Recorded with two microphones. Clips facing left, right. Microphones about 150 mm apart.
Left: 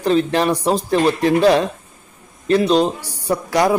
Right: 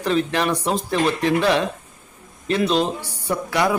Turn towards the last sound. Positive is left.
turn(degrees=30)  # may be behind; listen again after turning